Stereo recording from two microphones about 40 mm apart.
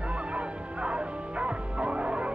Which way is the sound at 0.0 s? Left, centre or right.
Right.